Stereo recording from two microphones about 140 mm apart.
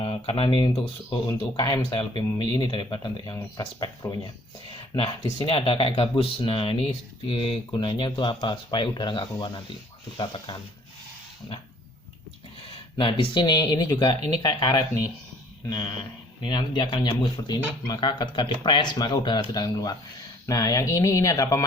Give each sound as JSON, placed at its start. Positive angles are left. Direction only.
{"t": 0.0, "sound": "speech", "side_deg": 35}
{"t": 13.0, "sound": "speech", "side_deg": 35}